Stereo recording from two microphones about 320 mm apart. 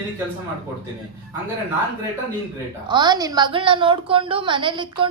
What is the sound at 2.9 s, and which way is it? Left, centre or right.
A woman's voice, centre.